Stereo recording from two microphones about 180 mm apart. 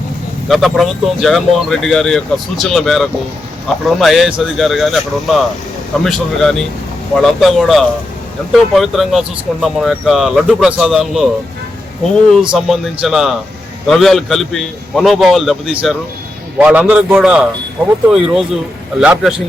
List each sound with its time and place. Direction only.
0.4 s speech: centre (ahead or behind)
12.3 s a man's voice: centre (ahead or behind)